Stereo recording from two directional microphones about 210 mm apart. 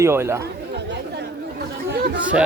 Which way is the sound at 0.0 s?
10° right (ahead or behind).